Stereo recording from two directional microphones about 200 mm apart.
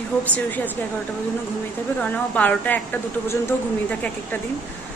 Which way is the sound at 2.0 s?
5° left (ahead or behind).